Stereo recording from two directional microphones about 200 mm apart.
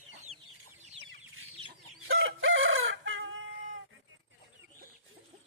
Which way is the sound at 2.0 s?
75° right (ahead or behind).